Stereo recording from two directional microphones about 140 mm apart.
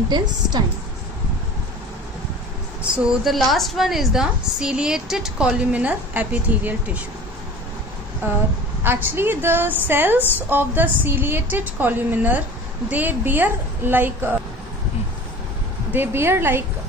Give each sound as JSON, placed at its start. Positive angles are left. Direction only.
{"t": 0.1, "sound": "a woman's voice", "side_deg": -30}
{"t": 3.0, "sound": "a woman's voice", "side_deg": -5}
{"t": 8.2, "sound": "a woman's voice", "side_deg": -15}
{"t": 15.9, "sound": "a woman's voice", "side_deg": -15}